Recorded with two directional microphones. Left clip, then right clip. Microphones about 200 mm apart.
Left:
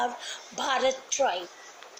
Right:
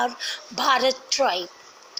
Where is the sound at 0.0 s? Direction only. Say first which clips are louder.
Right 5 dB; 35° right (ahead or behind).